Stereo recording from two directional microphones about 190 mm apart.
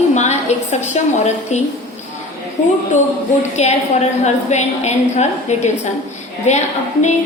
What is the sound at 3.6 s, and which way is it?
A woman's voice, 35° left (ahead or behind).